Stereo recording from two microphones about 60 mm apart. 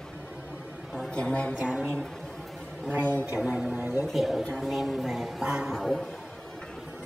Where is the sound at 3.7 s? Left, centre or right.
Right.